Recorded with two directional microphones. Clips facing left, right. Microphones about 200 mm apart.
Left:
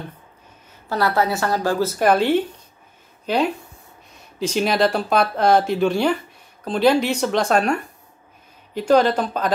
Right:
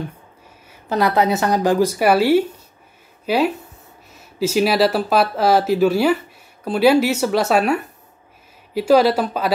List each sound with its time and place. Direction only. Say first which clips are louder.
0.7 s a woman's voice: right 3 dB; 20° right (ahead or behind)